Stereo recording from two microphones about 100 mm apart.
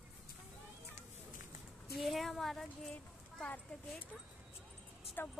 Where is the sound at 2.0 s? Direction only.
Centre (ahead or behind).